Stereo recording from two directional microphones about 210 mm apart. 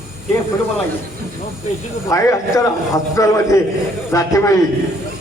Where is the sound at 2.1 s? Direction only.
15° left (ahead or behind).